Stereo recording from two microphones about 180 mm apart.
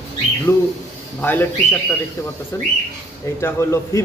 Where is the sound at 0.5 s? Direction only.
10° left (ahead or behind).